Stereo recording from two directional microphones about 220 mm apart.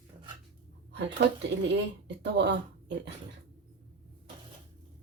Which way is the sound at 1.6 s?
50° right (ahead or behind).